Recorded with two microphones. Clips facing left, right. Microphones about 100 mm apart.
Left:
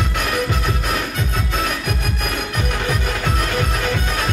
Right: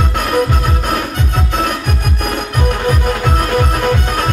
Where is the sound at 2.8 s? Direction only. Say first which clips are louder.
Right 6 dB; 50° right (ahead or behind).